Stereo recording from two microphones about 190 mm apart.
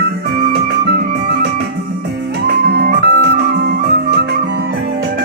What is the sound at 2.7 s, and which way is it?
Music, 60° right (ahead or behind).